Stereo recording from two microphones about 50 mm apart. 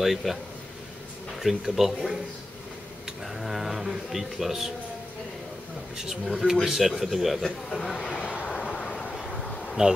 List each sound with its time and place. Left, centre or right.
0.0 s a man's voice: centre
1.4 s a man's voice: centre
3.3 s a man's voice: centre
5.9 s a man's voice: centre
8.0 s vehicle: left
8.5 s bee: centre